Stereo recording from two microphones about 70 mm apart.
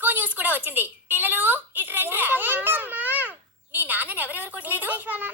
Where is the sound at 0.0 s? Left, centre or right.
Right.